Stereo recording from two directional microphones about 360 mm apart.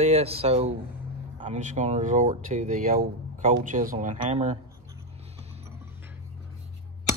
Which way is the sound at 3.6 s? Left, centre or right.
Right.